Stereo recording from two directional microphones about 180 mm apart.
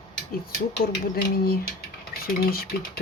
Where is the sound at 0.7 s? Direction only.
60° left (ahead or behind).